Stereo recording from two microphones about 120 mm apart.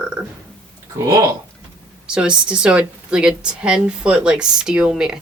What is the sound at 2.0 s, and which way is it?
A woman's voice, 5° right (ahead or behind).